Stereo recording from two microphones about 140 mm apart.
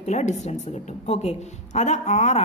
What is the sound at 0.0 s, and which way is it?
A woman's voice, 55° left (ahead or behind).